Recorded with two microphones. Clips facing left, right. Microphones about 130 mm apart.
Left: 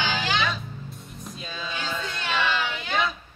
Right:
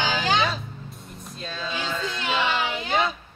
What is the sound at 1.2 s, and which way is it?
Speech, 10° left (ahead or behind).